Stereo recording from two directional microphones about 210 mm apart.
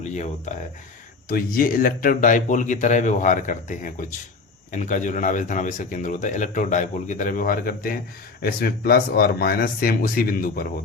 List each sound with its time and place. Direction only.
0.1 s speech: 35° left (ahead or behind)